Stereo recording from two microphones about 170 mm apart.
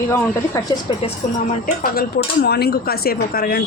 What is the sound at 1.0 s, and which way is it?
Speech, 40° left (ahead or behind).